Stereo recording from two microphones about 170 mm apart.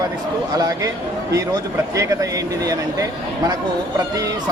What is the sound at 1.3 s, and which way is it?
A man's voice, 20° right (ahead or behind).